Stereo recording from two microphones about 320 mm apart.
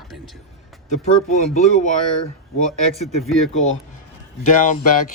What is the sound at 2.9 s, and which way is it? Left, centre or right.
Speech, centre.